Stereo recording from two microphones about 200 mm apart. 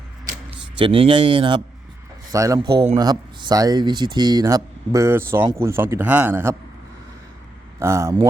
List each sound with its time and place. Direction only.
0.8 s speech: 25° right (ahead or behind)
7.8 s speech: 15° right (ahead or behind)